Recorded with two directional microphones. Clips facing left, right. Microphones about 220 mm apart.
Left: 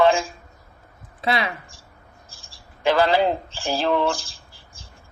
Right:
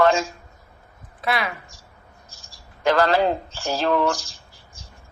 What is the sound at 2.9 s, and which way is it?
A man's voice, 15° left (ahead or behind).